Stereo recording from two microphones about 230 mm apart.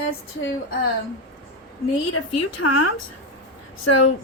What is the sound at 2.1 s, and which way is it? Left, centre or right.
A woman's voice, left.